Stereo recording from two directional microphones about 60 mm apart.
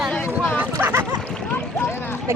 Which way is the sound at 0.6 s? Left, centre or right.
Right.